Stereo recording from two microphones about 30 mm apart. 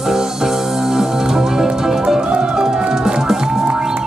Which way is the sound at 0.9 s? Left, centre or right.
Centre.